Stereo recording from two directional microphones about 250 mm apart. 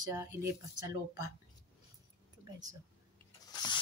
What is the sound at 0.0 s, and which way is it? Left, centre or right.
Speech, centre.